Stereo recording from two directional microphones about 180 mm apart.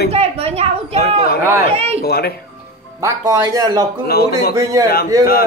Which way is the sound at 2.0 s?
60° left (ahead or behind).